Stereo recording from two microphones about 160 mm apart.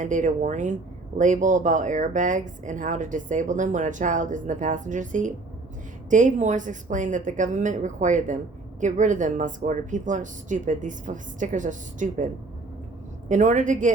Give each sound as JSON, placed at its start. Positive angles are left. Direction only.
{"t": 0.0, "sound": "speech", "side_deg": -50}